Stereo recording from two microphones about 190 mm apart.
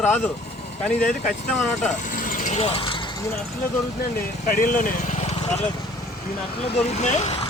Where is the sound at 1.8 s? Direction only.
40° left (ahead or behind).